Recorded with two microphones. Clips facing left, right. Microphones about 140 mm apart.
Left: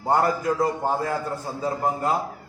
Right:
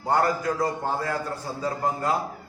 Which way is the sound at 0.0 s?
20° left (ahead or behind).